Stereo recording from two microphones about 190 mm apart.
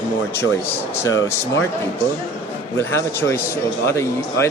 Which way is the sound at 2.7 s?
15° left (ahead or behind).